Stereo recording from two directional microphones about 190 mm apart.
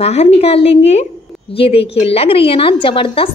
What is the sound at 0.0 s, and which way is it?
A woman's voice, 35° left (ahead or behind).